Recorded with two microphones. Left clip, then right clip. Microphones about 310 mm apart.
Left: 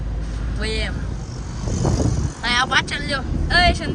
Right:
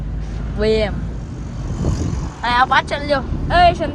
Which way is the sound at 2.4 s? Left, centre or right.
Centre.